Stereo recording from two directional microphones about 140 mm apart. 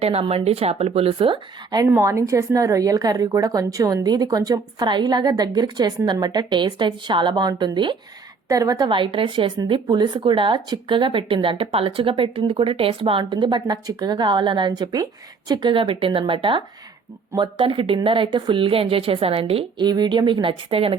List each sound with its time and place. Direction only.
0.0 s speech: 45° right (ahead or behind)
1.9 s a woman's voice: 20° right (ahead or behind); by 20.9 s 40° right (ahead or behind)